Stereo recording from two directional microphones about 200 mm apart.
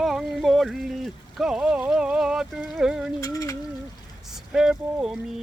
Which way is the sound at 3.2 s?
15° left (ahead or behind).